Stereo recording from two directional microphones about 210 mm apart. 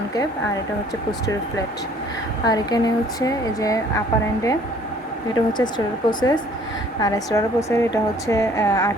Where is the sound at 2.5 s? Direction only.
20° left (ahead or behind).